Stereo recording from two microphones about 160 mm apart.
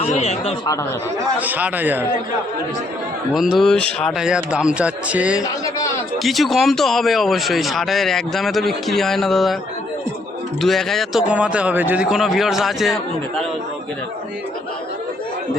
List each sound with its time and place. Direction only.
0.0 s speech: 45° left (ahead or behind)
1.4 s a man's voice: 10° right (ahead or behind)
3.3 s speech: centre (ahead or behind)
10.6 s speech: centre (ahead or behind)